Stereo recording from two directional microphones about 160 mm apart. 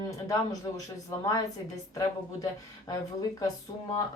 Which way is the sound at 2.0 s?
25° left (ahead or behind).